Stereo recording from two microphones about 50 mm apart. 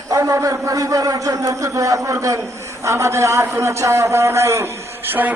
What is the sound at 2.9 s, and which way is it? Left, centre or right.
A man's voice, right.